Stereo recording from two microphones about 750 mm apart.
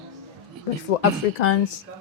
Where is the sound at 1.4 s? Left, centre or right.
Left.